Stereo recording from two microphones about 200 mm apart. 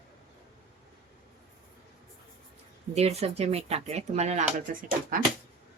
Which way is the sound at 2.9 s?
30° right (ahead or behind).